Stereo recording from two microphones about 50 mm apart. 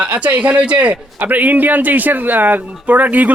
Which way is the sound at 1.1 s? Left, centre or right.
Right.